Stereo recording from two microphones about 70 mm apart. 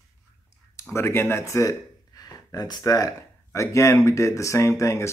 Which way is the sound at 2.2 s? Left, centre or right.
Left.